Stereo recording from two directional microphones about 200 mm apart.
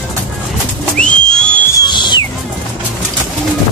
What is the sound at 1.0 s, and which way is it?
Whistle, 5° left (ahead or behind).